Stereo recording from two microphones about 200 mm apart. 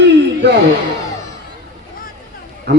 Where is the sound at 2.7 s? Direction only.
55° right (ahead or behind).